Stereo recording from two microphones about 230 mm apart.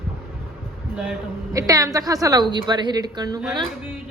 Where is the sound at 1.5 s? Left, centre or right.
Centre.